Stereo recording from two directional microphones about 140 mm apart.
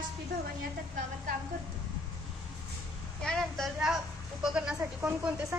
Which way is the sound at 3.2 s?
Centre (ahead or behind).